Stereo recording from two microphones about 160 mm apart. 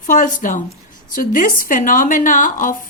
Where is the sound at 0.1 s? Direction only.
55° left (ahead or behind).